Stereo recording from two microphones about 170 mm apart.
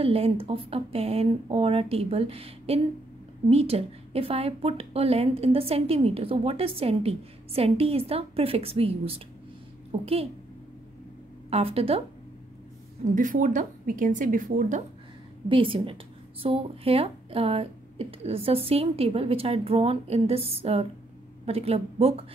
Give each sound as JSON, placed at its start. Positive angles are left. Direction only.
{"t": 0.0, "sound": "a woman's voice", "side_deg": -35}
{"t": 11.5, "sound": "a woman's voice", "side_deg": -35}
{"t": 13.0, "sound": "a woman's voice", "side_deg": -50}
{"t": 15.4, "sound": "a woman's voice", "side_deg": -30}